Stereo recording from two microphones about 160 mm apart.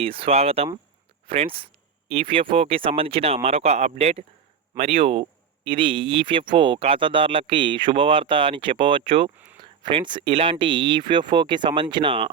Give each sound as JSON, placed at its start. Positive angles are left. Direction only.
{"t": 0.0, "sound": "speech", "side_deg": -35}